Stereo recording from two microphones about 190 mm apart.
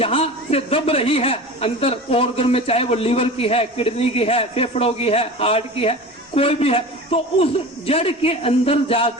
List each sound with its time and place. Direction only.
0.0 s a man's voice: 30° left (ahead or behind)